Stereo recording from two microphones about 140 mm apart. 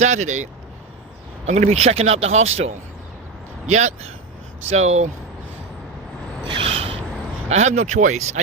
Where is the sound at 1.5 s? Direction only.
50° right (ahead or behind).